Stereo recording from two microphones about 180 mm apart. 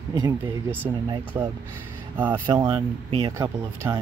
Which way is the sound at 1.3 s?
15° right (ahead or behind).